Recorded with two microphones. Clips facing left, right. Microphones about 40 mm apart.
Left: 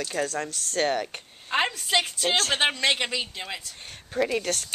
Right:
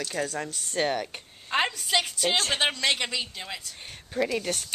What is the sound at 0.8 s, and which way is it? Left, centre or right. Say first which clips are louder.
A woman's voice: left 2 dB; centre.